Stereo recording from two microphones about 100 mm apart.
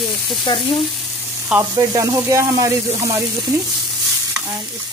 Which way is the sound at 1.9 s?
30° right (ahead or behind).